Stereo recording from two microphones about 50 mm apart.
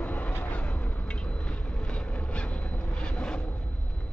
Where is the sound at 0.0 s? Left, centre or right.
Left.